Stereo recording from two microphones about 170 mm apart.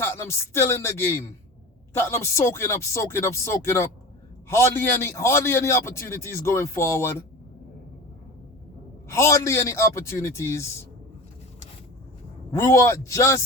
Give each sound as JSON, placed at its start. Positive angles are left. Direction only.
{"t": 0.0, "sound": "a man's voice", "side_deg": 15}
{"t": 9.0, "sound": "a man's voice", "side_deg": 15}
{"t": 12.5, "sound": "a man's voice", "side_deg": 15}